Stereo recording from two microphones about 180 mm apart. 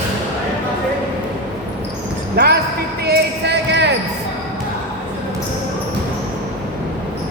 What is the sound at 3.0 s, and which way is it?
Basketball bounce, 65° right (ahead or behind).